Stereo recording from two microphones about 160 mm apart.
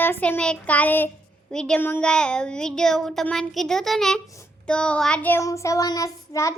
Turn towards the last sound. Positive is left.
turn(degrees=20)  # may be behind; listen again after turning